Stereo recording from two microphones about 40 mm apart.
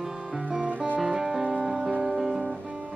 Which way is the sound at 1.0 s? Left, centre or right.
Centre.